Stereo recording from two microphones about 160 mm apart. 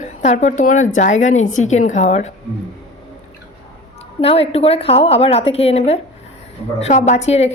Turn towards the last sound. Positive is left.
turn(degrees=45)  # may be behind; listen again after turning